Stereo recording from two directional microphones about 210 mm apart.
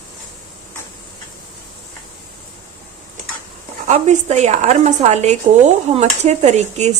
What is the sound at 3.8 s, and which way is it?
A woman's voice, 35° right (ahead or behind).